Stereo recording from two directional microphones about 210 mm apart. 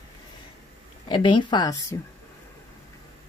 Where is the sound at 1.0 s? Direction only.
20° left (ahead or behind).